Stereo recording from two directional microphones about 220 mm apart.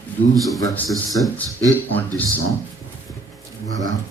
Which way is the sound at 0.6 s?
15° left (ahead or behind).